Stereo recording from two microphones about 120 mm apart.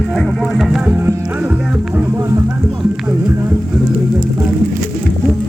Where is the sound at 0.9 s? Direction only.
15° right (ahead or behind).